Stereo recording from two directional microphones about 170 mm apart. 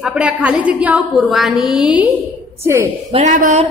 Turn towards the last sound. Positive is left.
turn(degrees=-45)  # may be behind; listen again after turning